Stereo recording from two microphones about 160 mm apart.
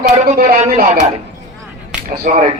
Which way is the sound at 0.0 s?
55° right (ahead or behind).